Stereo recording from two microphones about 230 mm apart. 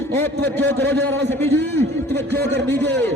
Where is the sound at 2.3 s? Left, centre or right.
Centre.